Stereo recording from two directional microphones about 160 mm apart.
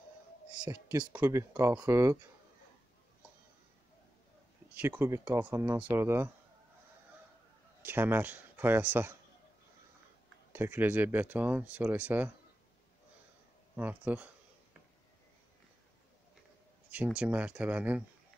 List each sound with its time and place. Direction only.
0.7 s speech: 15° right (ahead or behind)
4.7 s speech: 10° right (ahead or behind)
7.8 s speech: 15° right (ahead or behind)
10.5 s speech: 15° right (ahead or behind)
13.7 s speech: 10° right (ahead or behind)
16.9 s speech: 5° right (ahead or behind)